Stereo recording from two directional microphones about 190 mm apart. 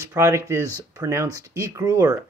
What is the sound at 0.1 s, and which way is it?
Speech, 15° right (ahead or behind).